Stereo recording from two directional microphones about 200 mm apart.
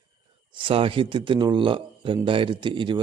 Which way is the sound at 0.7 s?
25° right (ahead or behind).